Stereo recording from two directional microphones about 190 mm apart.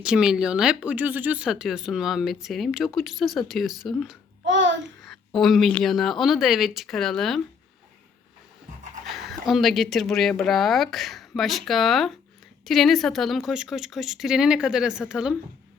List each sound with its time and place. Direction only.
0.0 s speech: 5° right (ahead or behind)
4.4 s a sound: 75° right (ahead or behind)
5.0 s speech: centre (ahead or behind)
9.1 s speech: centre (ahead or behind)